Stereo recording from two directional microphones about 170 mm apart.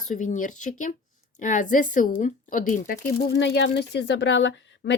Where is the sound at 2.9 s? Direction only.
90° left.